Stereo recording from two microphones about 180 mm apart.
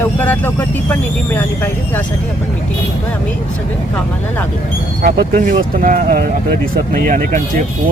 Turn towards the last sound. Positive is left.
turn(degrees=-50)  # may be behind; listen again after turning